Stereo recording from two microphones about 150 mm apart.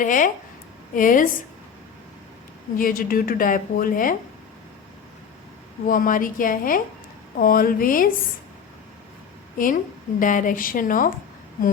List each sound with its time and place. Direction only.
0.0 s a woman's voice: 60° left (ahead or behind)
2.7 s speech: 70° left (ahead or behind)
5.8 s speech: 65° left (ahead or behind)
9.6 s a woman's voice: 65° left (ahead or behind)